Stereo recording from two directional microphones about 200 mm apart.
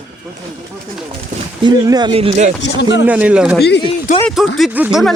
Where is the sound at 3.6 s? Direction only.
55° left (ahead or behind).